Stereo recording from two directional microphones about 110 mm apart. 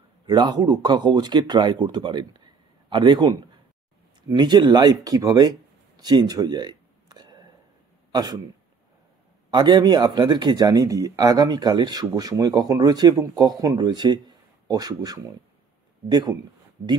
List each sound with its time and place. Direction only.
0.3 s a man's voice: 40° right (ahead or behind)
9.5 s speech: 40° right (ahead or behind)